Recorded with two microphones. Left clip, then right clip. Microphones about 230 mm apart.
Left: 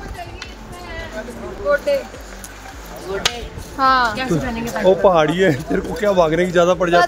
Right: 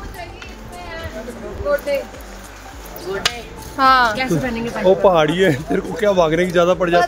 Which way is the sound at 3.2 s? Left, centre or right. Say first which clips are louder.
Even; centre.